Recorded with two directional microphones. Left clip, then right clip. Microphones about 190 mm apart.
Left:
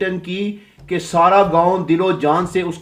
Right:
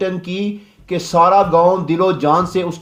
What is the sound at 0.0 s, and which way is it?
Speech, 35° right (ahead or behind).